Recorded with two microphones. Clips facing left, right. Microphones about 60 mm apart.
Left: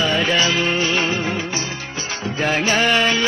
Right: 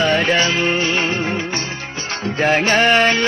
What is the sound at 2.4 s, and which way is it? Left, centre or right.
Speech, right.